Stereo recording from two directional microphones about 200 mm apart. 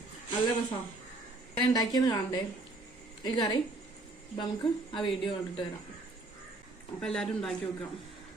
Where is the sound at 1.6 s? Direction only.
20° left (ahead or behind).